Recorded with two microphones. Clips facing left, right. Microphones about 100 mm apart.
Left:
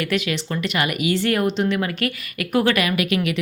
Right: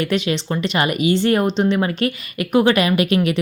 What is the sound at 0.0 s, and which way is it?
Speech, 30° right (ahead or behind).